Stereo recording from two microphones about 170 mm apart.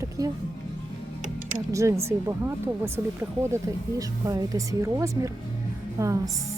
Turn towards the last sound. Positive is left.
turn(degrees=-15)  # may be behind; listen again after turning